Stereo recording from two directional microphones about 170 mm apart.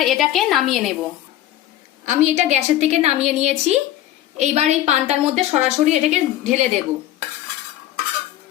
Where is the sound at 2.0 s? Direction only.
45° right (ahead or behind).